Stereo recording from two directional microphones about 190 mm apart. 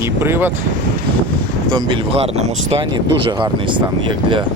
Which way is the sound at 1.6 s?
25° right (ahead or behind).